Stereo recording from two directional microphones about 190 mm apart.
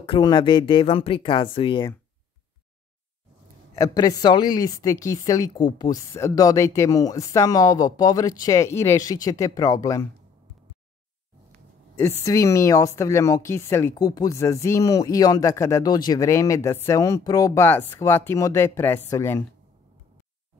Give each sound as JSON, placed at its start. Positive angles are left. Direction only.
{"t": 0.0, "sound": "a woman's voice", "side_deg": 25}
{"t": 3.7, "sound": "a woman's voice", "side_deg": 20}
{"t": 12.0, "sound": "a woman's voice", "side_deg": 15}